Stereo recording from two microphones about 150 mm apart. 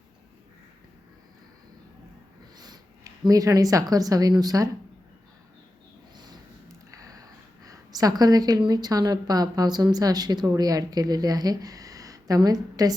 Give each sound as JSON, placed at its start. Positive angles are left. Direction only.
{"t": 2.6, "sound": "speech", "side_deg": -25}
{"t": 6.1, "sound": "a sound", "side_deg": -30}
{"t": 6.9, "sound": "a woman's voice", "side_deg": -25}